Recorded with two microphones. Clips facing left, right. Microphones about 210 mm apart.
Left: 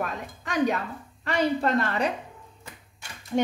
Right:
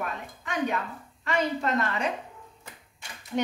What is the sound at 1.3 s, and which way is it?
Speech, 35° left (ahead or behind).